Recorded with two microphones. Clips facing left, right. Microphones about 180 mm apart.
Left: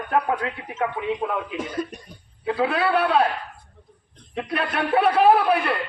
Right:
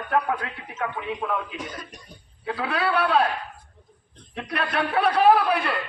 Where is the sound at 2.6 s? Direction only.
25° left (ahead or behind).